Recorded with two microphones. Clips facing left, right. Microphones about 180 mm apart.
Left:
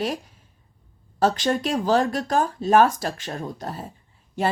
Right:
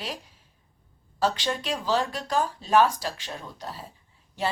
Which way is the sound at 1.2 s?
45° left (ahead or behind).